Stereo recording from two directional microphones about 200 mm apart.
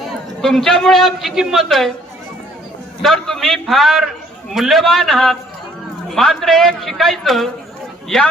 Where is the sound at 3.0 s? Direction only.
Centre (ahead or behind).